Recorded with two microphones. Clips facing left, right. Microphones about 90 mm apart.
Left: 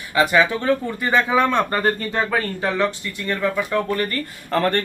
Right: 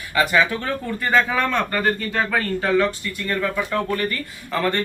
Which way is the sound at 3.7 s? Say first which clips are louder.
Left 1 dB; 35° left (ahead or behind).